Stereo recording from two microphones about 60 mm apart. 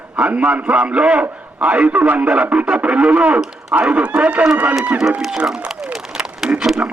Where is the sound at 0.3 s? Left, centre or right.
Right.